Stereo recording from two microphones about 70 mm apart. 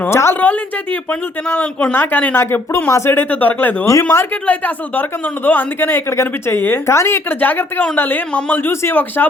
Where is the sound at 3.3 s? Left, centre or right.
Left.